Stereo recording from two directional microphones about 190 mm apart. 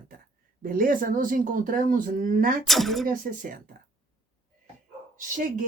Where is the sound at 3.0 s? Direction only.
45° right (ahead or behind).